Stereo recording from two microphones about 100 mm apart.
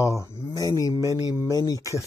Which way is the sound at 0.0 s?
30° left (ahead or behind).